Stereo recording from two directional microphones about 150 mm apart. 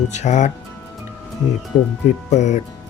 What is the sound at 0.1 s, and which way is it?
Speech, 50° left (ahead or behind).